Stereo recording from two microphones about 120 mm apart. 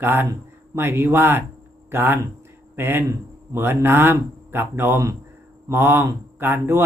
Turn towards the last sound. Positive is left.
turn(degrees=-20)  # may be behind; listen again after turning